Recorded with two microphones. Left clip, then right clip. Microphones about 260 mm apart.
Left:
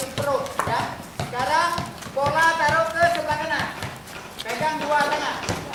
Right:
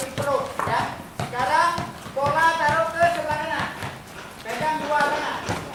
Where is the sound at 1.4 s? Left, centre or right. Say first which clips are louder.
Right 1 dB; centre.